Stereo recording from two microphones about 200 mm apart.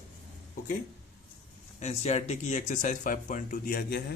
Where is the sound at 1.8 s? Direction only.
30° left (ahead or behind); by 4.0 s 50° left (ahead or behind).